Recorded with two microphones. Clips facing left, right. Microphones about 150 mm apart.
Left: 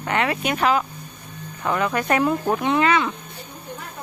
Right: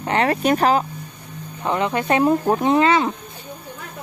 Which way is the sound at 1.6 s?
25° right (ahead or behind).